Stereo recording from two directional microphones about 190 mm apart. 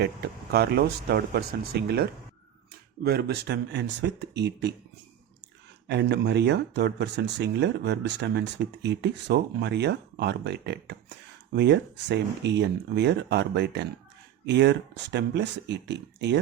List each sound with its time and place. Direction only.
0.0 s speech: 60° right (ahead or behind)
5.9 s speech: 60° right (ahead or behind)